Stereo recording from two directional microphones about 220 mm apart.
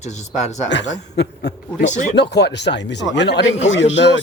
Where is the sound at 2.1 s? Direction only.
50° left (ahead or behind).